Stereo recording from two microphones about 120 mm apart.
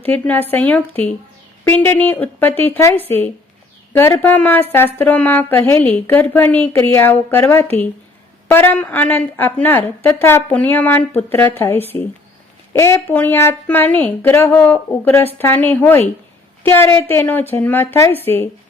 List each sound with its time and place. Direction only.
0.0 s a woman's voice: 15° left (ahead or behind)